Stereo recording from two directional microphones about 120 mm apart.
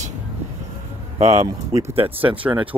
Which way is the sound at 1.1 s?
60° right (ahead or behind).